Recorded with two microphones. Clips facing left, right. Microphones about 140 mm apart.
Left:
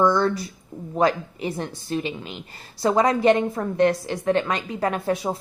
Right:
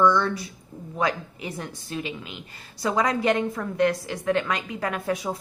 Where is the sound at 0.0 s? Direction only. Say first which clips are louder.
Left 2 dB; 35° left (ahead or behind).